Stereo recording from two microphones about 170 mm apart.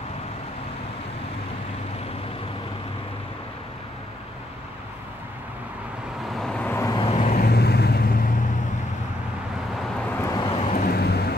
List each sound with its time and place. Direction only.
6.3 s vehicle: 5° left (ahead or behind)
7.0 s vehicle: 35° left (ahead or behind)
7.3 s vehicle: 70° left (ahead or behind)
10.3 s vehicle: 30° left (ahead or behind)
10.6 s vehicle: 45° left (ahead or behind)
10.9 s vehicle: 70° left (ahead or behind)